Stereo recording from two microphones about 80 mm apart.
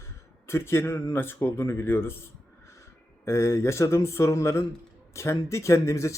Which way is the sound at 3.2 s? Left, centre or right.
Left.